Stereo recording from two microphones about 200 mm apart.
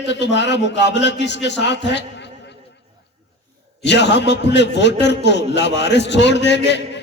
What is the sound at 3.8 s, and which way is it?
A man's voice, 60° left (ahead or behind).